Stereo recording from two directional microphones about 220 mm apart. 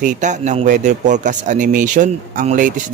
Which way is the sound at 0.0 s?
35° right (ahead or behind).